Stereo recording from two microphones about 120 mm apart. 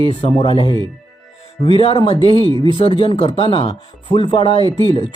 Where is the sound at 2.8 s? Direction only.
45° left (ahead or behind).